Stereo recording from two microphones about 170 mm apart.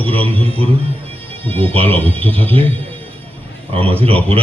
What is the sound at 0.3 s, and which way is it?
Speech, 35° right (ahead or behind).